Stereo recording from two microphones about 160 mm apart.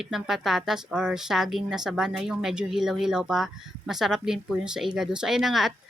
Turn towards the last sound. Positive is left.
turn(degrees=0)  # may be behind; listen again after turning